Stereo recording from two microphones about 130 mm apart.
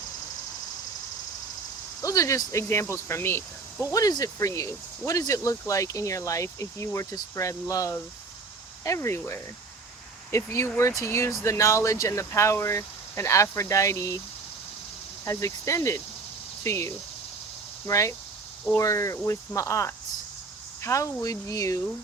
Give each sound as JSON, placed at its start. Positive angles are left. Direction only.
{"t": 2.0, "sound": "speech", "side_deg": 25}
{"t": 15.2, "sound": "speech", "side_deg": 25}